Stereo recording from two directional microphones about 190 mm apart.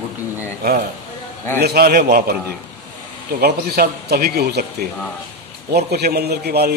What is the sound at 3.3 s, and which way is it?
A man's voice, 55° right (ahead or behind).